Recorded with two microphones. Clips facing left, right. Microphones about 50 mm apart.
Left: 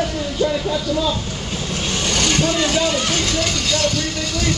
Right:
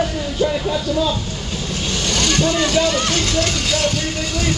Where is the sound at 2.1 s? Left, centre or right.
Left.